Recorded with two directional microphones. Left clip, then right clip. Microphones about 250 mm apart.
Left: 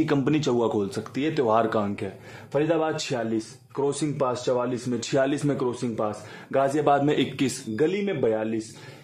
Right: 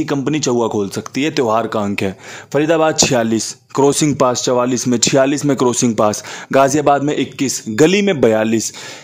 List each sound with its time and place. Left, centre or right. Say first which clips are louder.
0.0 s speech: right 6 dB; right
2.0 s speech: right 13 dB; right
5.0 s speech: right 10 dB; right
7.7 s speech: right 14 dB; right